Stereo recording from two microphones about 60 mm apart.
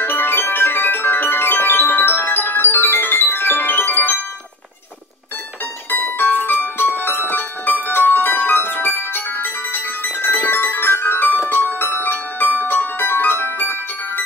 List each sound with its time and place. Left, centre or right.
0.0 s music: left
5.9 s music: left